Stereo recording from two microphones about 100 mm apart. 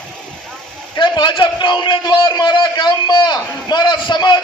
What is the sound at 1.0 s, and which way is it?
A man's voice, 50° left (ahead or behind).